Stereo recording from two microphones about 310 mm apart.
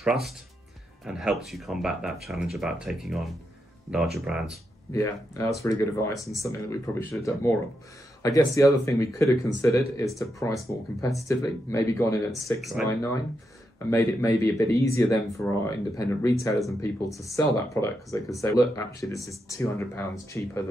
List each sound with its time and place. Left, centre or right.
0.0 s speech: centre
4.9 s speech: centre
13.8 s speech: centre